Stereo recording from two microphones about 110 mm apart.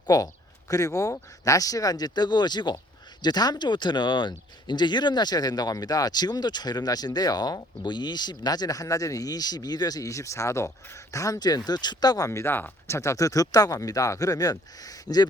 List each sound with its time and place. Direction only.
0.1 s speech: 35° left (ahead or behind)